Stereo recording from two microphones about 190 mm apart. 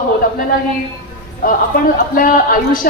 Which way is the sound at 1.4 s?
45° left (ahead or behind).